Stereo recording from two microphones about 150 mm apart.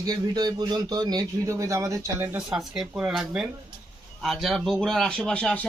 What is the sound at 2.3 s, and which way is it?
A man's voice, 5° right (ahead or behind).